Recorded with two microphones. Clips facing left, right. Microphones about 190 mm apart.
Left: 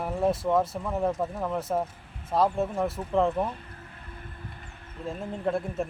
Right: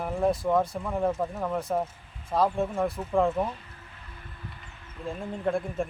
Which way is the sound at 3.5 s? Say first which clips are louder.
Left 1 dB; 50° left (ahead or behind).